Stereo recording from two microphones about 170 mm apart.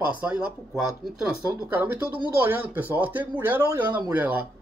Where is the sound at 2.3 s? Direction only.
10° right (ahead or behind).